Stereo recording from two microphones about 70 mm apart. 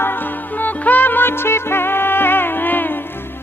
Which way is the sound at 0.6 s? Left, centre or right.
Left.